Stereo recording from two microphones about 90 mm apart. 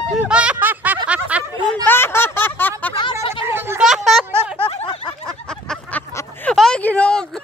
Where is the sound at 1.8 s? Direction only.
25° left (ahead or behind).